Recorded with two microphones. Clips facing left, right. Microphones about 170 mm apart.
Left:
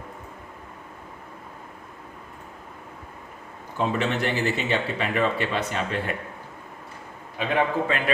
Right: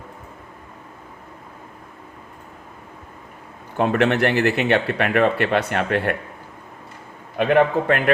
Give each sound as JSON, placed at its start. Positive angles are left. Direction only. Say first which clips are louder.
{"t": 3.8, "sound": "speech", "louder": "right 7 dB", "side_deg": -65}
{"t": 7.3, "sound": "speech", "louder": "right 7 dB", "side_deg": -60}